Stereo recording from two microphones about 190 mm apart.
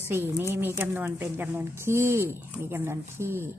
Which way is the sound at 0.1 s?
15° right (ahead or behind).